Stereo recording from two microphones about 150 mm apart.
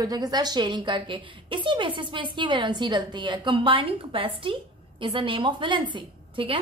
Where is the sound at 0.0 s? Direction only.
25° right (ahead or behind).